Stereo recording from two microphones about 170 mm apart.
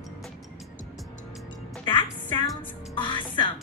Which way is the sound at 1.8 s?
25° left (ahead or behind).